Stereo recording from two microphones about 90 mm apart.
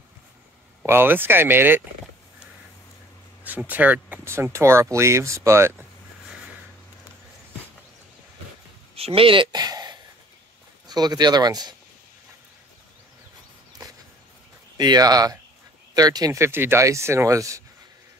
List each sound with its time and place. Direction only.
0.8 s speech: 25° right (ahead or behind)
3.4 s speech: 20° right (ahead or behind)
4.2 s speech: 30° right (ahead or behind)
8.9 s speech: 90° right
9.5 s a sound: 50° right (ahead or behind)
10.9 s speech: 50° right (ahead or behind)
14.8 s speech: 50° right (ahead or behind)
16.3 s speech: 30° right (ahead or behind)